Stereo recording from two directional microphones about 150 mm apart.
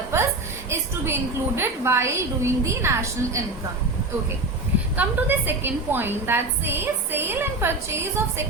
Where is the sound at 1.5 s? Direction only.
15° right (ahead or behind).